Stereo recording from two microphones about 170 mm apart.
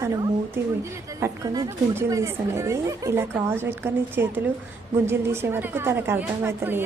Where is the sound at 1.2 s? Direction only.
15° right (ahead or behind).